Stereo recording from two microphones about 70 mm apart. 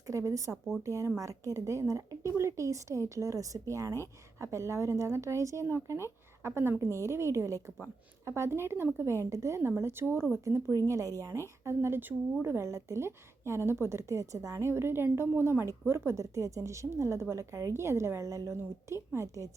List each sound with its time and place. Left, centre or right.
0.1 s a woman's voice: right